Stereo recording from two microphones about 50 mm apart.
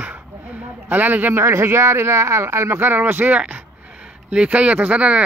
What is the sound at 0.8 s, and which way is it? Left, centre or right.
Speech, right.